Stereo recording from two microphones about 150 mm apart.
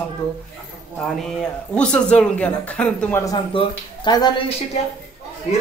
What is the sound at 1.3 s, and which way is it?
Speech, 5° left (ahead or behind).